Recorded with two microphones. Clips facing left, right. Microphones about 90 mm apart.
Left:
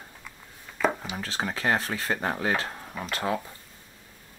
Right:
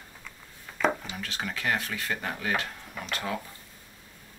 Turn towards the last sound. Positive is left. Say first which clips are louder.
# left 4 dB
turn(degrees=30)  # may be behind; listen again after turning